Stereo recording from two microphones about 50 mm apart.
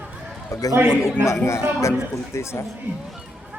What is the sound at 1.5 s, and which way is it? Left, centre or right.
Speech, left.